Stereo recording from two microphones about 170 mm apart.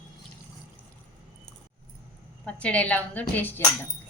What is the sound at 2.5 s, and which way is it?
A woman's voice, 5° left (ahead or behind).